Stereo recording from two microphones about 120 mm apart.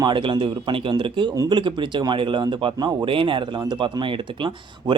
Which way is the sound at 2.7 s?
30° right (ahead or behind).